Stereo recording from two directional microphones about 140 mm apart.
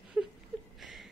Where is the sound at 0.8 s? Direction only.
Centre (ahead or behind).